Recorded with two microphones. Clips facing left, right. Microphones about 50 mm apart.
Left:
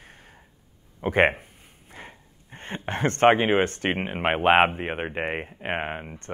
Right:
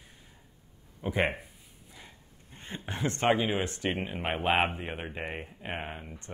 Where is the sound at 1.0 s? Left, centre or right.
Left.